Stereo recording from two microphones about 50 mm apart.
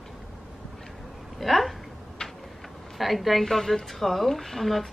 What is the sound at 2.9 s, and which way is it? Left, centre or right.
A woman's voice, centre.